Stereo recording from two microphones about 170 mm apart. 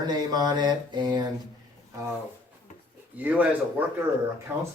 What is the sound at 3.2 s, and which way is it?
Speech, 10° right (ahead or behind).